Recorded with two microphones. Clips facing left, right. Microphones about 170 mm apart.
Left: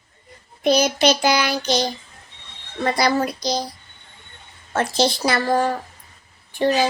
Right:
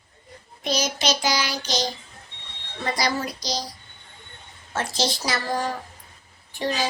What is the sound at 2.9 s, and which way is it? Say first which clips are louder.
Speech: left 6 dB; 60° left (ahead or behind).